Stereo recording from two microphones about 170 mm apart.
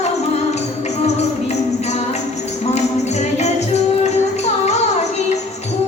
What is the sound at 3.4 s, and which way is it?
Music, 40° left (ahead or behind).